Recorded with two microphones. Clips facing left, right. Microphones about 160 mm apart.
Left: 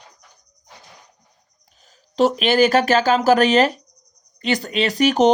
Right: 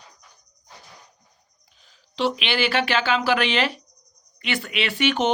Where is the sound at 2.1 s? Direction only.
45° left (ahead or behind).